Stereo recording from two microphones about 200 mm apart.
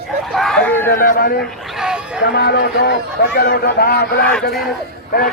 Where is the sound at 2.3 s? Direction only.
55° left (ahead or behind).